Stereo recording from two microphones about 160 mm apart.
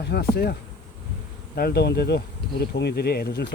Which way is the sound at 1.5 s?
70° left (ahead or behind).